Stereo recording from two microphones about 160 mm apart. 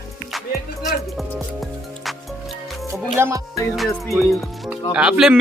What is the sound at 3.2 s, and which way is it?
Music, 15° right (ahead or behind).